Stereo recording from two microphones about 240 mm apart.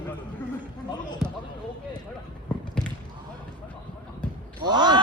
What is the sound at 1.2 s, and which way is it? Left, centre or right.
Basketball bounce, centre.